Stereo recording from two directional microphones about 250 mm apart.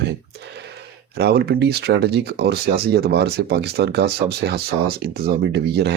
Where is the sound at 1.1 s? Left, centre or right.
Right.